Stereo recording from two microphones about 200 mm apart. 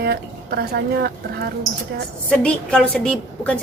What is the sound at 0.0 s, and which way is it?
Speech, 55° right (ahead or behind).